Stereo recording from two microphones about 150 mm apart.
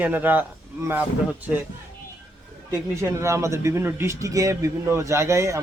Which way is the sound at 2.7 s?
20° right (ahead or behind).